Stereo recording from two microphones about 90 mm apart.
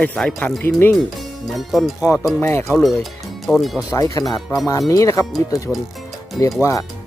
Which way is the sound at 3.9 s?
40° left (ahead or behind).